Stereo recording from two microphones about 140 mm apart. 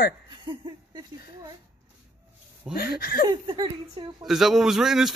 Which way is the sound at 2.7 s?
90° left.